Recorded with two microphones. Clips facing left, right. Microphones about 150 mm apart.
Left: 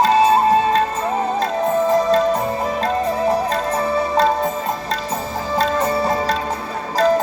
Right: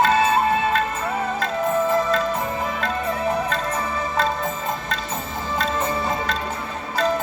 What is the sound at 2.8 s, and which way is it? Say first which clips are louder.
Music: left 5 dB; 35° left (ahead or behind).